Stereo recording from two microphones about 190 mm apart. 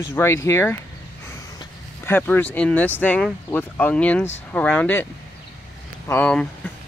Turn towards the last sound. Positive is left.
turn(degrees=10)  # may be behind; listen again after turning